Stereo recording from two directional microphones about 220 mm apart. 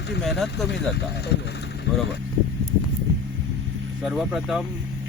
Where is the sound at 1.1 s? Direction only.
50° left (ahead or behind).